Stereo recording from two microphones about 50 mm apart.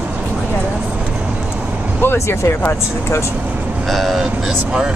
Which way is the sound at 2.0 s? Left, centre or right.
Left.